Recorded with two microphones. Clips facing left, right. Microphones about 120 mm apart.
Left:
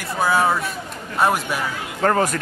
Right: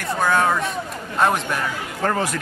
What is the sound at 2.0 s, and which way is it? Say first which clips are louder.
Speech: left 4 dB; 50° left (ahead or behind).